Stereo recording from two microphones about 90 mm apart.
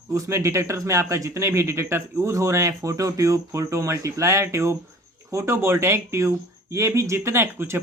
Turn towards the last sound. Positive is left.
turn(degrees=-30)  # may be behind; listen again after turning